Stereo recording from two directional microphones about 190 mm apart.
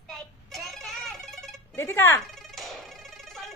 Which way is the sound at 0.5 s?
Centre (ahead or behind).